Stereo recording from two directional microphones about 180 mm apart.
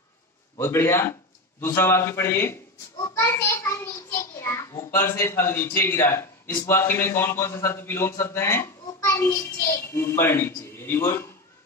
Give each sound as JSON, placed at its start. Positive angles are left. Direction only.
{"t": 0.6, "sound": "a man's voice", "side_deg": 15}
{"t": 3.2, "sound": "a sound", "side_deg": 15}
{"t": 6.6, "sound": "a man's voice", "side_deg": 15}